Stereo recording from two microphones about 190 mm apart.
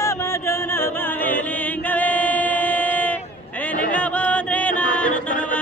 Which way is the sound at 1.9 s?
10° left (ahead or behind).